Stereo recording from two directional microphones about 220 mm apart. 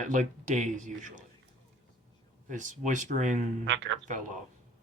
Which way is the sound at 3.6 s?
55° right (ahead or behind).